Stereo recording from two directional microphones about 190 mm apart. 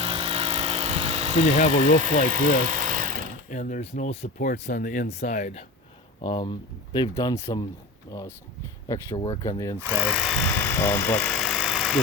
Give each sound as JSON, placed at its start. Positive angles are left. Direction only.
{"t": 0.0, "sound": "vehicle", "side_deg": -30}
{"t": 1.5, "sound": "speech", "side_deg": 40}
{"t": 2.3, "sound": "a sound", "side_deg": -45}
{"t": 3.5, "sound": "speech", "side_deg": 40}
{"t": 6.2, "sound": "speech", "side_deg": 25}
{"t": 8.9, "sound": "speech", "side_deg": 20}
{"t": 9.8, "sound": "speech", "side_deg": -5}